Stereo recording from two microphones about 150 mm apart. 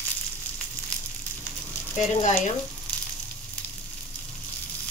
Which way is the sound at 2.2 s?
50° left (ahead or behind).